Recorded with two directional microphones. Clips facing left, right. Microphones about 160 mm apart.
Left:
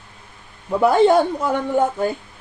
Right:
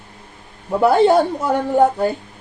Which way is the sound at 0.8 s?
Centre (ahead or behind).